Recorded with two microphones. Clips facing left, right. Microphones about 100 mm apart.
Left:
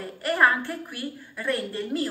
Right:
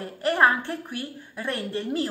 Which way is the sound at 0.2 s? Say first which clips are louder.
Right 1 dB; 25° right (ahead or behind).